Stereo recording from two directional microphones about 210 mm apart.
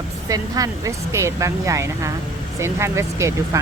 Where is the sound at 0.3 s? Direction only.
15° right (ahead or behind).